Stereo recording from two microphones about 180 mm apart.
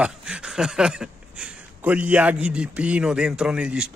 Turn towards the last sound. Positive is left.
turn(degrees=-5)  # may be behind; listen again after turning